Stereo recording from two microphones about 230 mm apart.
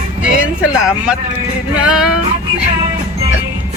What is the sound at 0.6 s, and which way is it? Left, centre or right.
Speech, centre.